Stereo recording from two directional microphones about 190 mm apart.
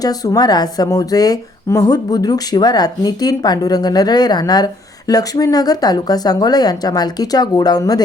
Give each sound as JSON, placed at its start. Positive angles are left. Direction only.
{"t": 0.0, "sound": "speech", "side_deg": 20}